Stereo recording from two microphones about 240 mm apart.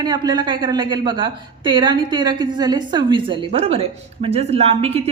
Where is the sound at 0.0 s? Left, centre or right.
Centre.